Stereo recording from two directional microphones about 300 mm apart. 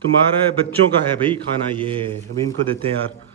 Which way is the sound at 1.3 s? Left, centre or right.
Centre.